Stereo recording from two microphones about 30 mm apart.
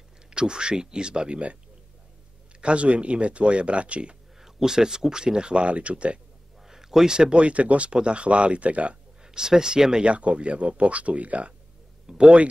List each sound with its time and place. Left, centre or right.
0.3 s speech: right
2.6 s speech: right
4.4 s speech: centre; by 5.7 s right
5.7 s speech: right
6.6 s a sound: centre
7.1 s speech: right
7.3 s speech: right
7.9 s speech: right
9.2 s speech: right
10.0 s speech: right
12.1 s speech: centre